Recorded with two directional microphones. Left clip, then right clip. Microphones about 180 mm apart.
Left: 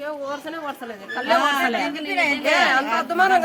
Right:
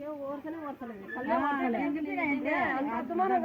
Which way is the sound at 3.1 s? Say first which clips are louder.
Left 11 dB; 40° left (ahead or behind).